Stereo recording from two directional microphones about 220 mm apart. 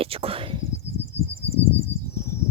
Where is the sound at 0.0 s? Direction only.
25° right (ahead or behind).